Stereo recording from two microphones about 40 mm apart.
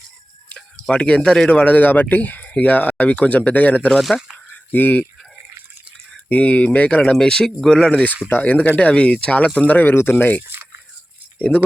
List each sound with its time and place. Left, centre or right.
0.9 s speech: left
1.7 s speech: left
4.1 s speech: centre
4.7 s speech: left
6.2 s speech: left
7.1 s speech: centre
8.4 s speech: left
8.9 s speech: left
9.6 s speech: left
9.9 s speech: left
10.2 s speech: left
10.4 s biting: right